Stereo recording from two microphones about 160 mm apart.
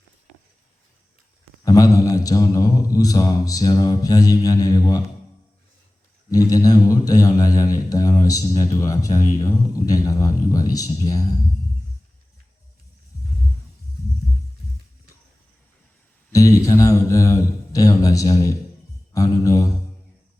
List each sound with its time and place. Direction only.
1.6 s a man's voice: 20° left (ahead or behind)
6.3 s a man's voice: 20° left (ahead or behind)
16.3 s a man's voice: 20° left (ahead or behind)